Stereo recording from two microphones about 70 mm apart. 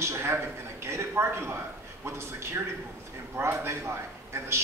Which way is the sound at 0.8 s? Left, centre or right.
Right.